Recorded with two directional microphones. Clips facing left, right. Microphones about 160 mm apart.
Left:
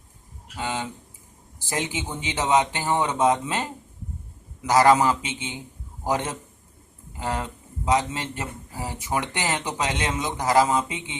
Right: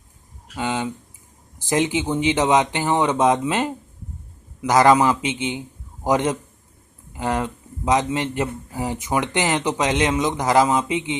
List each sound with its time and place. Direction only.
0.5 s speech: 20° right (ahead or behind)
7.9 s speech: 20° right (ahead or behind)